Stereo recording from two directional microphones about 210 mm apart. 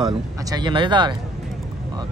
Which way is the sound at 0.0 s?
20° right (ahead or behind).